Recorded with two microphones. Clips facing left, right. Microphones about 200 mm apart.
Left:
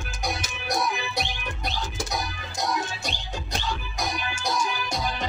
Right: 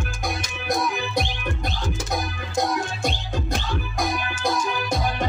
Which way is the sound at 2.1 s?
55° right (ahead or behind).